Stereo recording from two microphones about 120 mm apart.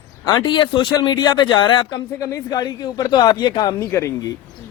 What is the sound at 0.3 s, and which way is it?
Speech, 40° left (ahead or behind).